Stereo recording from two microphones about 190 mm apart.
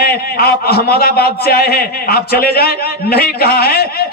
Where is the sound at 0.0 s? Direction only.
55° left (ahead or behind).